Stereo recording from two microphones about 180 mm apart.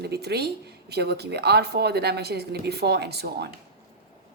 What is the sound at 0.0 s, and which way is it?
A woman's voice, 65° right (ahead or behind).